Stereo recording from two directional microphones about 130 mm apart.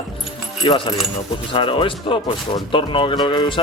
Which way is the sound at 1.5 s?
40° left (ahead or behind).